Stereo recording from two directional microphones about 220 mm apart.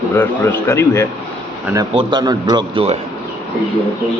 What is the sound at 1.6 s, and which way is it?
A man's voice, 10° right (ahead or behind).